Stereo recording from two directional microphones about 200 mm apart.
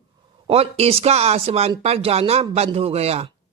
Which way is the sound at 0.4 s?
30° right (ahead or behind).